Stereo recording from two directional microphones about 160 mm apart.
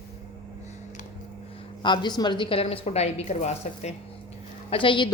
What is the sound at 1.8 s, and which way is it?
A woman's voice, 30° left (ahead or behind).